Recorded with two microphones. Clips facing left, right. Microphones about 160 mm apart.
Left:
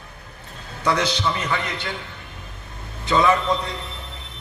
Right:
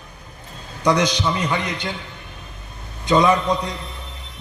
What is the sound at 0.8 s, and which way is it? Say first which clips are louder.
A man's voice: right 3 dB; 15° right (ahead or behind).